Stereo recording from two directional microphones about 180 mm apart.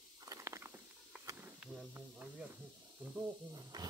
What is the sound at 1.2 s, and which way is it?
Snake, 20° right (ahead or behind).